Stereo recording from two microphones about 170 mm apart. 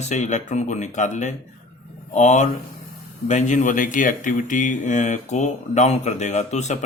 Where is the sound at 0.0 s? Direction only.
45° left (ahead or behind).